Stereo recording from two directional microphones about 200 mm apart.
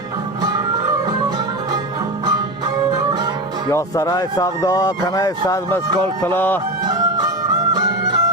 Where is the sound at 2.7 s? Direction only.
20° right (ahead or behind).